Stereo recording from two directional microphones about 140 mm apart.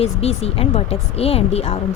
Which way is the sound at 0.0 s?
45° left (ahead or behind).